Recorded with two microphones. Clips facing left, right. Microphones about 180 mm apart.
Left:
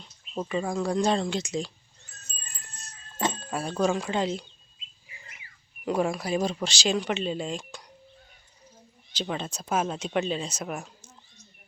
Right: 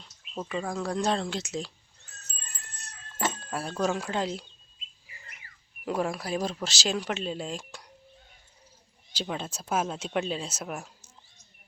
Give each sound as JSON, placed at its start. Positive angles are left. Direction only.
{"t": 0.3, "sound": "speech", "side_deg": 5}
{"t": 2.7, "sound": "music", "side_deg": -65}
{"t": 3.2, "sound": "jingle bell", "side_deg": 20}
{"t": 3.8, "sound": "speech", "side_deg": -5}
{"t": 5.8, "sound": "speech", "side_deg": 0}
{"t": 9.1, "sound": "speech", "side_deg": -5}